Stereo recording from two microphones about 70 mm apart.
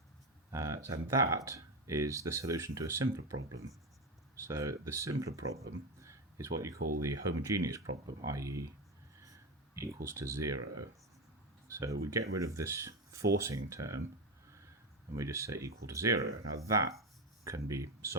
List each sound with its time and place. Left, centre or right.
0.5 s speech: right
4.4 s speech: right
9.7 s speech: right
11.7 s speech: right
15.1 s speech: right